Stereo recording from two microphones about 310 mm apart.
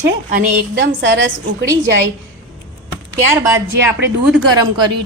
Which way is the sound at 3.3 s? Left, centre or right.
Centre.